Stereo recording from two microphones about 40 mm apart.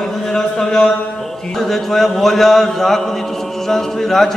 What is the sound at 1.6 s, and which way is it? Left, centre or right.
A man's voice, centre.